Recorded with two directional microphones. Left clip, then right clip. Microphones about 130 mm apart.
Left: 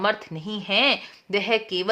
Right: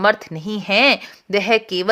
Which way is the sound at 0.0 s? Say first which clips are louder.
Right 7 dB; 40° right (ahead or behind).